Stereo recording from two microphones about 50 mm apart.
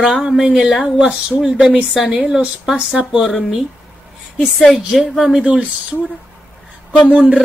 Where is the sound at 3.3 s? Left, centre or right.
Centre.